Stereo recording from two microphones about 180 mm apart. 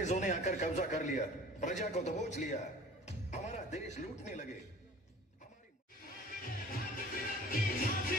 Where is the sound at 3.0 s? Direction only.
40° left (ahead or behind).